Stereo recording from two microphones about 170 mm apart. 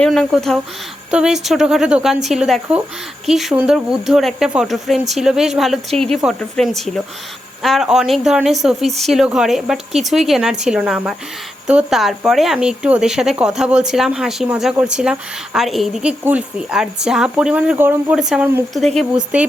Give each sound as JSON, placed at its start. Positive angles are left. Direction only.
{"t": 0.0, "sound": "speech", "side_deg": 5}